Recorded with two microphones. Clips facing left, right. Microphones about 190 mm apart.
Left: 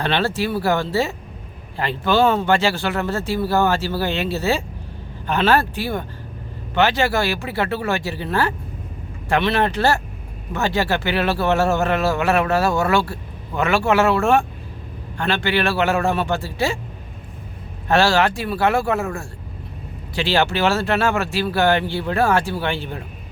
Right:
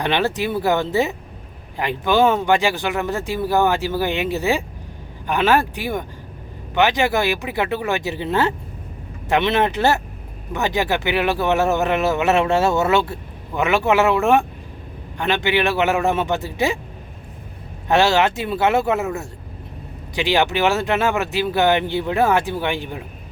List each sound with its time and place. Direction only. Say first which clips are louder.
0.0 s speech: right 1 dB; 15° right (ahead or behind)
17.8 s speech: right 1 dB; 20° right (ahead or behind)